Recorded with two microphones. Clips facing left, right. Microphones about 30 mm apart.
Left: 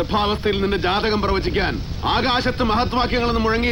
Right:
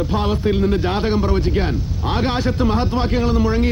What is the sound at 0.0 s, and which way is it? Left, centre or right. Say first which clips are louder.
Speech: even; left.